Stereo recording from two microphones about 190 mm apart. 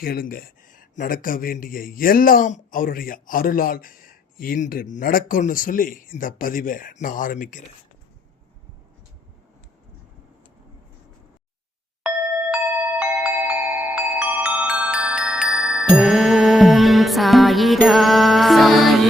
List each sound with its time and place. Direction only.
0.0 s speech: 50° left (ahead or behind)
13.0 s glockenspiel: 10° right (ahead or behind)
15.9 s music: centre (ahead or behind)